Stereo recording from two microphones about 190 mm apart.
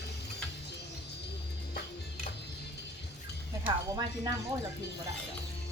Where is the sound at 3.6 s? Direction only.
20° right (ahead or behind).